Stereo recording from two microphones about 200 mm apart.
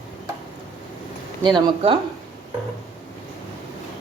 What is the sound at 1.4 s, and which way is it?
Speech, 20° right (ahead or behind).